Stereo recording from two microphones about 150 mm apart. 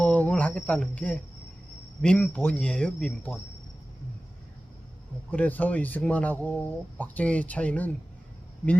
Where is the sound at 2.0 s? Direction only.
5° left (ahead or behind).